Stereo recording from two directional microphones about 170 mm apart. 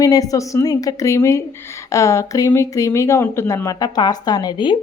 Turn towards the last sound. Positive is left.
turn(degrees=25)  # may be behind; listen again after turning